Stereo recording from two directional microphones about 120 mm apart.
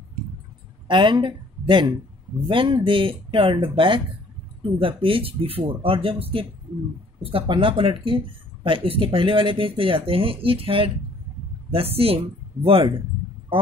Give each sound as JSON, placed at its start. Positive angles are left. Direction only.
{"t": 0.8, "sound": "speech", "side_deg": -40}